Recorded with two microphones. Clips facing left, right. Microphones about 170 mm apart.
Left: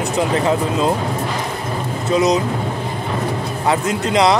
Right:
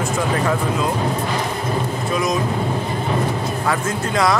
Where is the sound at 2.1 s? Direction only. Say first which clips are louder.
Left 6 dB; 20° left (ahead or behind).